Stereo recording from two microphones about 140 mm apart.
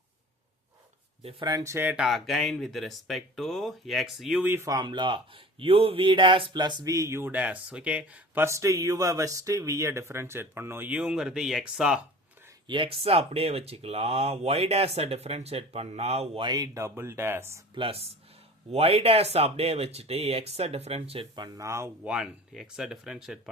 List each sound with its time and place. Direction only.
1.2 s speech: 40° right (ahead or behind)
1.5 s speech: 20° right (ahead or behind)
2.0 s speech: centre (ahead or behind)
4.4 s speech: 20° right (ahead or behind)
8.4 s speech: 20° right (ahead or behind); by 11.9 s 5° right (ahead or behind)
12.6 s speech: 35° right (ahead or behind)
16.5 s speech: 25° right (ahead or behind)
17.7 s speech: 45° right (ahead or behind)
21.3 s speech: 30° right (ahead or behind)
21.7 s speech: 20° right (ahead or behind)
22.0 s speech: 5° right (ahead or behind)